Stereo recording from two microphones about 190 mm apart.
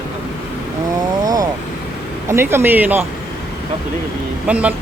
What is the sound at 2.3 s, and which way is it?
Speech, 10° right (ahead or behind).